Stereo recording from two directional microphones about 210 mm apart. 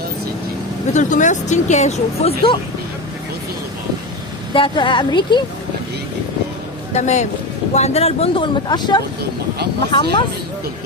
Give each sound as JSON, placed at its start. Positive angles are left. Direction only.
{"t": 0.9, "sound": "speech", "side_deg": 35}
{"t": 4.5, "sound": "speech", "side_deg": 25}
{"t": 6.9, "sound": "speech", "side_deg": 35}